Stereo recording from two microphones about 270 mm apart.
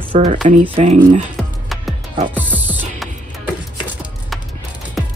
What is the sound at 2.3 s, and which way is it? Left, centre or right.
Music, centre.